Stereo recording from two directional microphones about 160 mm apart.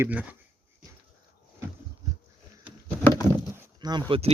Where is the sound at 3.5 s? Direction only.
25° right (ahead or behind).